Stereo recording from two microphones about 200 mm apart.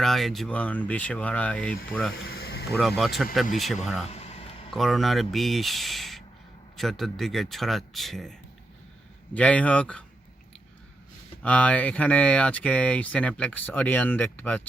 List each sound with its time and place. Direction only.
0.0 s speech: centre (ahead or behind)
2.2 s a sound: 50° left (ahead or behind)
2.7 s speech: centre (ahead or behind)
4.1 s a sound: 30° left (ahead or behind)
4.7 s speech: centre (ahead or behind)
11.4 s speech: 5° left (ahead or behind)